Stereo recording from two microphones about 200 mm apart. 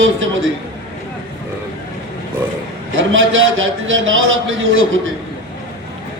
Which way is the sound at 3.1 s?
75° right (ahead or behind).